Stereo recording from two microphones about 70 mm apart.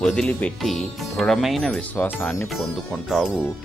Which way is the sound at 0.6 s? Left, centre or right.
Centre.